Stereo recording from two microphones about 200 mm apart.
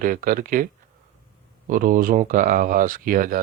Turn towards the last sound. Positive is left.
turn(degrees=-45)  # may be behind; listen again after turning